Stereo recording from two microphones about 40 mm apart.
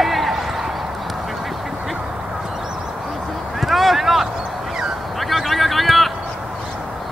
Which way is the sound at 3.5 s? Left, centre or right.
Centre.